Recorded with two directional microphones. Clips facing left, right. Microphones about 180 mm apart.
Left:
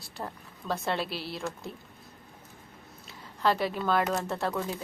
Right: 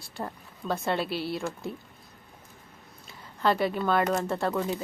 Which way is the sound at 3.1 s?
Centre (ahead or behind).